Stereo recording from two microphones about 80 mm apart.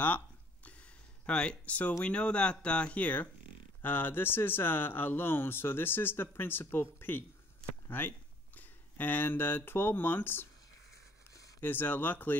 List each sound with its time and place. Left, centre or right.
0.7 s a sound: centre
2.0 s speech: centre
11.6 s speech: left